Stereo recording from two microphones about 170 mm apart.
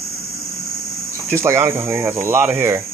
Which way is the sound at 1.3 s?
15° right (ahead or behind).